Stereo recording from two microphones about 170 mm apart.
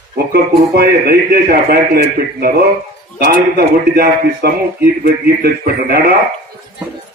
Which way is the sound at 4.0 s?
65° right (ahead or behind).